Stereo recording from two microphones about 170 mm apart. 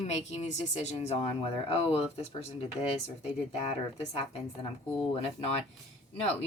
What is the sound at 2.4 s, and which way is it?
Speech, 35° left (ahead or behind).